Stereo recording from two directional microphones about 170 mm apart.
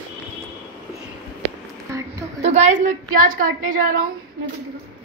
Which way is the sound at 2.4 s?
40° right (ahead or behind).